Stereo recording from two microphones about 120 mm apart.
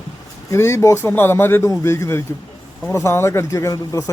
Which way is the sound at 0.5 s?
20° left (ahead or behind).